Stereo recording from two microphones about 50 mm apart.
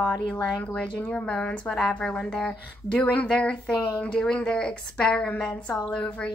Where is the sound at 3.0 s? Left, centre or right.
Left.